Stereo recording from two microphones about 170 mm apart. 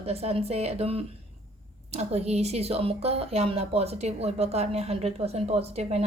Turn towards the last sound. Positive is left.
turn(degrees=-40)  # may be behind; listen again after turning